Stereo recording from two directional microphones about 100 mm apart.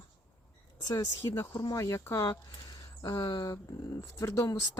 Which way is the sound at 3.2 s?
55° left (ahead or behind).